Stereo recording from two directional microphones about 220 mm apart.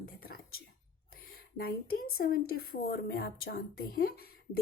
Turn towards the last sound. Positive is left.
turn(degrees=45)  # may be behind; listen again after turning